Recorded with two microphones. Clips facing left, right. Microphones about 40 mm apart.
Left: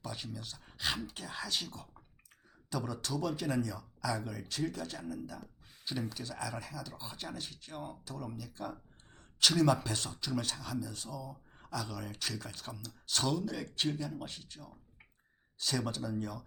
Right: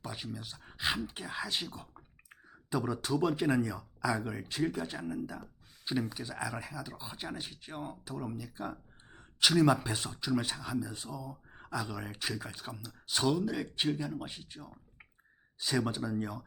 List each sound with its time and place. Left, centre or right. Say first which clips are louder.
0.0 s speech: right 2 dB; centre